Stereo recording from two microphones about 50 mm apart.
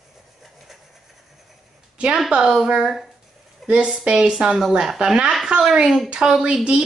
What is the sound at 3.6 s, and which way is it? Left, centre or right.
Speech, centre.